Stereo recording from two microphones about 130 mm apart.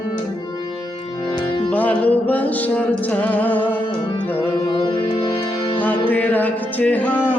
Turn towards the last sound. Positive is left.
turn(degrees=10)  # may be behind; listen again after turning